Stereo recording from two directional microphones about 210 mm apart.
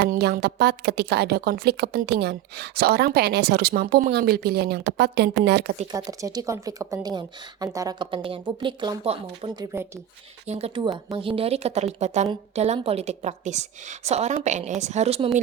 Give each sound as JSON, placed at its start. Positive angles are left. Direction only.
{"t": 0.1, "sound": "a woman's voice", "side_deg": -50}
{"t": 5.9, "sound": "a woman's voice", "side_deg": -15}